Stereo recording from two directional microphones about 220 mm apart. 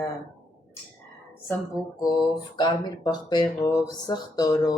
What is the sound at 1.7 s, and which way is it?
A woman's voice, 20° left (ahead or behind).